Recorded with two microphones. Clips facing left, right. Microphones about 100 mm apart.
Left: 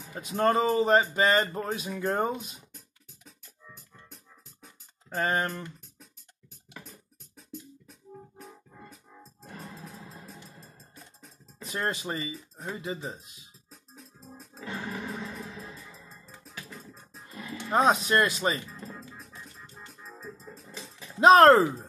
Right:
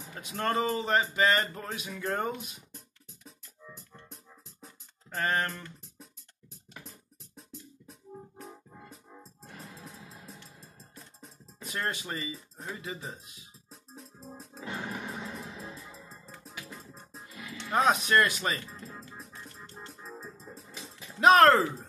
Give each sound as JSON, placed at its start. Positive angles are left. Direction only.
{"t": 0.3, "sound": "speech", "side_deg": 25}
{"t": 3.7, "sound": "music", "side_deg": 0}
{"t": 5.2, "sound": "speech", "side_deg": 20}
{"t": 7.9, "sound": "music", "side_deg": 0}
{"t": 8.7, "sound": "music", "side_deg": -10}
{"t": 11.6, "sound": "speech", "side_deg": 25}
{"t": 13.7, "sound": "music", "side_deg": 0}
{"t": 14.6, "sound": "music", "side_deg": -15}
{"t": 17.3, "sound": "music", "side_deg": 35}
{"t": 17.6, "sound": "speech", "side_deg": 25}
{"t": 18.9, "sound": "music", "side_deg": 0}
{"t": 20.5, "sound": "a sound", "side_deg": -15}
{"t": 21.0, "sound": "speech", "side_deg": 30}